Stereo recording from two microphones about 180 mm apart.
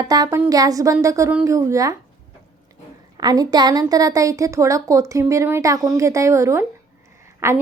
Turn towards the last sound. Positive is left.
turn(degrees=-15)  # may be behind; listen again after turning